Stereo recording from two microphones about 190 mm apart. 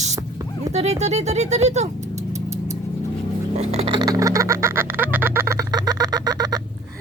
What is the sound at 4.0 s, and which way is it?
Duck, 20° right (ahead or behind).